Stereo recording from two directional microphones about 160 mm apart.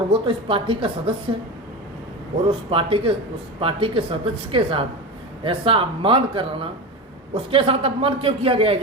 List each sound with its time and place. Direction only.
0.1 s a man's voice: 35° right (ahead or behind)
2.5 s a man's voice: 35° right (ahead or behind)